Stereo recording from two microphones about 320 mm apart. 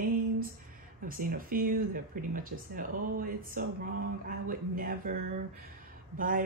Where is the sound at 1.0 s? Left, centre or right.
Right.